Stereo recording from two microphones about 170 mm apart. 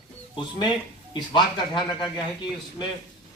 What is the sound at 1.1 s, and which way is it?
Speech, 25° left (ahead or behind).